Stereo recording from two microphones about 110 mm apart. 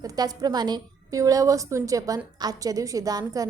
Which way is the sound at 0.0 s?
35° right (ahead or behind).